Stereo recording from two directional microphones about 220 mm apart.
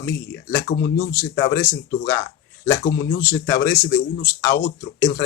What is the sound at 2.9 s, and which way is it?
Speech, 45° left (ahead or behind).